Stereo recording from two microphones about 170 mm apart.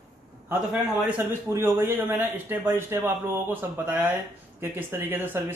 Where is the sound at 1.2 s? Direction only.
15° right (ahead or behind).